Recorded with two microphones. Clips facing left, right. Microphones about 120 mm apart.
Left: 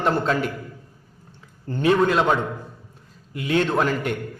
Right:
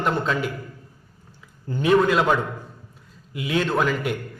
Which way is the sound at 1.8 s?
35° left (ahead or behind).